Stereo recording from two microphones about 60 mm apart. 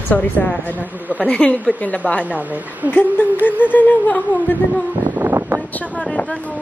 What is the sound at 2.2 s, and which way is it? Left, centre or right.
Speech, right.